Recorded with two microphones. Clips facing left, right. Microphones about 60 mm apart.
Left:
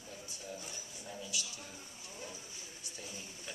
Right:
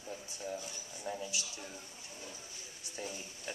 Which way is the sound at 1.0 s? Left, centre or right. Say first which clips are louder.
Right 4 dB; right.